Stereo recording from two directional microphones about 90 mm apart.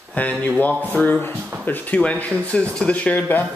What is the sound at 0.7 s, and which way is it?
Speech, 20° right (ahead or behind).